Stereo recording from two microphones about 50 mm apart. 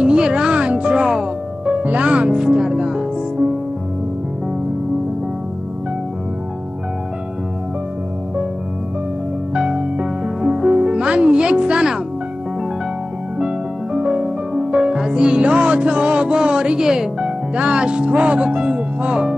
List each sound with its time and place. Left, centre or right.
0.0 s music: centre
1.7 s music: right
9.5 s music: centre
13.9 s music: right